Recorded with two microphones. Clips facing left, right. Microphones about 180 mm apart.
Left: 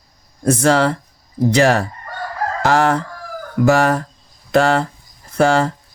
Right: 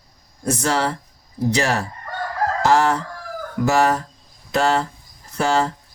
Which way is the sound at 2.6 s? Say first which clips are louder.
Left 2 dB; 60° left (ahead or behind).